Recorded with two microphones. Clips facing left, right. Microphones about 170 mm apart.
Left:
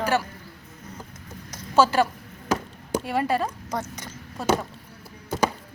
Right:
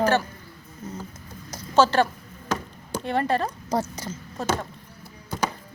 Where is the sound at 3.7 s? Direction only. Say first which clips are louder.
Right 5 dB; 30° right (ahead or behind).